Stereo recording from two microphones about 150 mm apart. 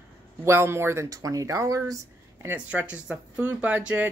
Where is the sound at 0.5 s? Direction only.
15° right (ahead or behind).